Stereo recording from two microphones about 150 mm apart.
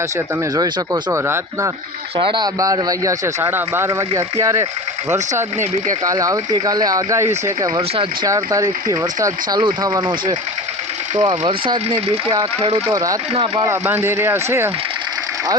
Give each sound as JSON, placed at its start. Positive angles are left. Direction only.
{"t": 1.1, "sound": "speech", "side_deg": -20}
{"t": 2.1, "sound": "speech", "side_deg": -30}
{"t": 6.1, "sound": "speech", "side_deg": -25}
{"t": 7.8, "sound": "speech", "side_deg": -40}
{"t": 8.3, "sound": "speech", "side_deg": -20}
{"t": 11.2, "sound": "speech", "side_deg": -30}
{"t": 12.9, "sound": "speech", "side_deg": -25}
{"t": 13.7, "sound": "speech", "side_deg": -15}